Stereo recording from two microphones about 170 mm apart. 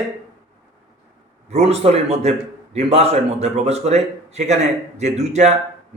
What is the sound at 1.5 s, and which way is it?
A man's voice, 40° right (ahead or behind).